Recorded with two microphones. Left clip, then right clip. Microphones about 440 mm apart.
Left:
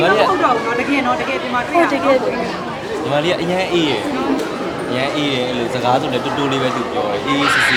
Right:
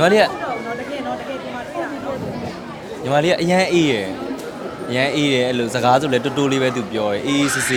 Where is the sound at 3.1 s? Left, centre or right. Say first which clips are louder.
Right 2 dB; right.